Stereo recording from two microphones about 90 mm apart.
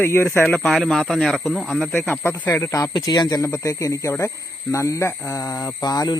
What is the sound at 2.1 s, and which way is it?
Speech, 20° left (ahead or behind).